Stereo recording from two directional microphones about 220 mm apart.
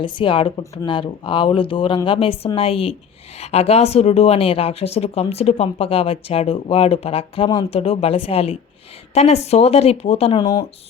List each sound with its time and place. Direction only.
0.0 s speech: 20° left (ahead or behind)